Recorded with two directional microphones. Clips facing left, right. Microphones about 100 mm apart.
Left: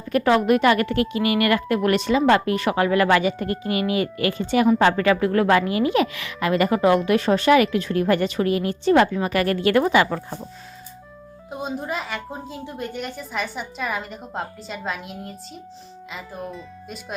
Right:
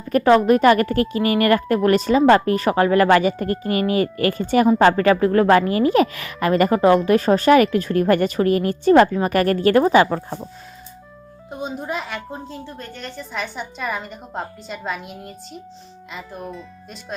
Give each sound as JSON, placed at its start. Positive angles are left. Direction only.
{"t": 0.1, "sound": "a woman's voice", "side_deg": -35}
{"t": 11.5, "sound": "a woman's voice", "side_deg": 0}